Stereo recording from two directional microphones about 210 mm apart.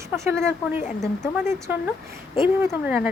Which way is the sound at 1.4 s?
10° right (ahead or behind).